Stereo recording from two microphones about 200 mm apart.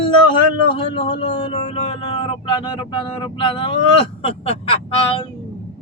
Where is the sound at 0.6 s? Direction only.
25° left (ahead or behind).